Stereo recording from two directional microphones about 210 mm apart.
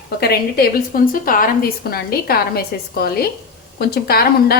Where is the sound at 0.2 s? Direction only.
50° left (ahead or behind).